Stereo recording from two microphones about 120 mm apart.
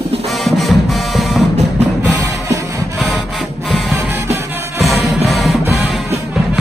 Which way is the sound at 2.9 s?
Centre (ahead or behind).